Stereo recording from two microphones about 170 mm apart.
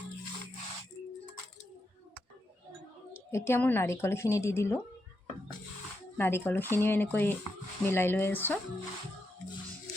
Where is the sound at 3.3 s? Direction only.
15° left (ahead or behind).